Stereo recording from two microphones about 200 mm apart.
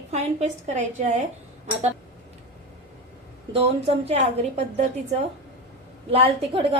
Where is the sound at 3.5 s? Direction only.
30° right (ahead or behind).